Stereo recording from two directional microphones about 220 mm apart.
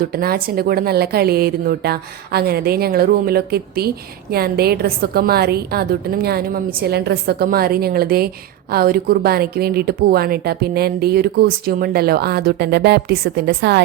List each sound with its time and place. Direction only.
0.0 s a woman's voice: 45° right (ahead or behind)